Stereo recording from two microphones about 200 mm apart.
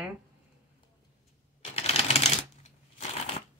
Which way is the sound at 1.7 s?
30° left (ahead or behind).